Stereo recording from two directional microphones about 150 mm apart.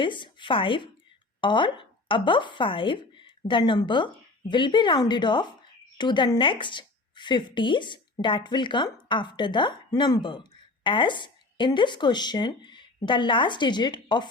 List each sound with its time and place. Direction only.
0.0 s a woman's voice: 35° left (ahead or behind)